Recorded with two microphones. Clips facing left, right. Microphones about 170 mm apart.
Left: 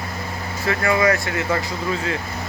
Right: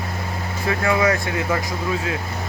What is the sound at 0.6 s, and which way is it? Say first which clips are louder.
Speech: left 1 dB; 10° right (ahead or behind).